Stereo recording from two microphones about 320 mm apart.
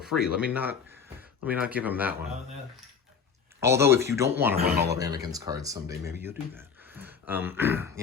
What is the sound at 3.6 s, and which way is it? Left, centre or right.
Speech, centre.